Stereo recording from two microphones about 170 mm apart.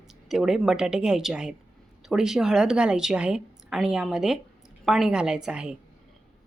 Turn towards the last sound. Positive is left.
turn(degrees=-5)  # may be behind; listen again after turning